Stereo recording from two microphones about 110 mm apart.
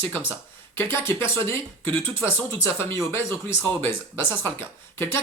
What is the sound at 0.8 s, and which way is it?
Speech, 20° left (ahead or behind).